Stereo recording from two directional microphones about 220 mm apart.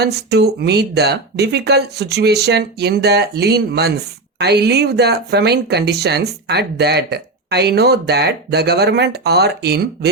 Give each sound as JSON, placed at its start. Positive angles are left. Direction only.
{"t": 0.0, "sound": "speech", "side_deg": -50}